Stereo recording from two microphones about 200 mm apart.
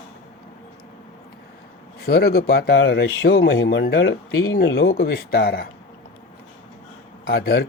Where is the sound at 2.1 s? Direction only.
50° left (ahead or behind).